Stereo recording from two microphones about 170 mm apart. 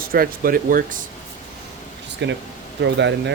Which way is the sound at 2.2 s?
90° right.